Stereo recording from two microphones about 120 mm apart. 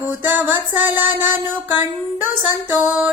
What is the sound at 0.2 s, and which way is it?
Music, 15° right (ahead or behind).